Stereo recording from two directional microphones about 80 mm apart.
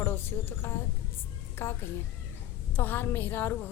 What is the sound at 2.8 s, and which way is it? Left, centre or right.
Speech, left.